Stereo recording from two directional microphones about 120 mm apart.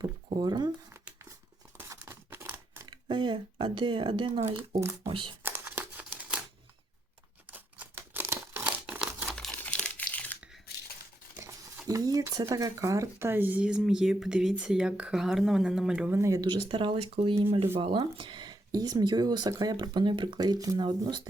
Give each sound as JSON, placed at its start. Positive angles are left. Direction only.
{"t": 0.0, "sound": "a sound", "side_deg": -35}
{"t": 1.8, "sound": "tearing", "side_deg": -20}
{"t": 2.8, "sound": "speech", "side_deg": -40}
{"t": 5.4, "sound": "crumpling", "side_deg": -15}
{"t": 7.5, "sound": "crumpling", "side_deg": -15}
{"t": 9.3, "sound": "crumpling", "side_deg": 5}
{"t": 11.9, "sound": "a sound", "side_deg": -30}
{"t": 12.3, "sound": "speech", "side_deg": -30}
{"t": 16.2, "sound": "speech", "side_deg": -30}
{"t": 16.5, "sound": "speech", "side_deg": -45}